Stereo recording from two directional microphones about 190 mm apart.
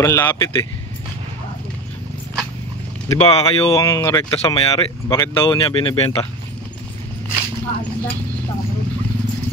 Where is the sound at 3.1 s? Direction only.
20° left (ahead or behind).